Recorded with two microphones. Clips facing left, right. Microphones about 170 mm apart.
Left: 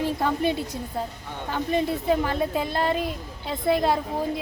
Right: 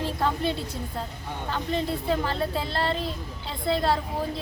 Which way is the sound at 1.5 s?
15° left (ahead or behind).